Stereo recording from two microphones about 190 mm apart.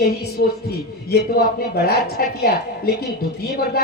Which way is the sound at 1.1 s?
55° left (ahead or behind).